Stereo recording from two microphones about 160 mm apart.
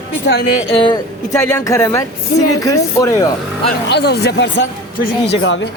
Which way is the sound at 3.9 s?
90° left.